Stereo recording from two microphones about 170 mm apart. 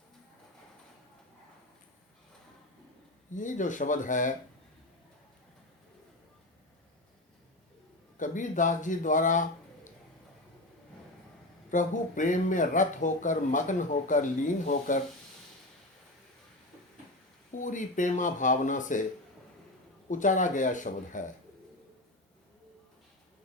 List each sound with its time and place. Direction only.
3.3 s speech: 50° left (ahead or behind)
8.2 s speech: 50° left (ahead or behind)
11.7 s speech: 50° left (ahead or behind)
17.6 s speech: 50° left (ahead or behind)
20.1 s speech: 50° left (ahead or behind)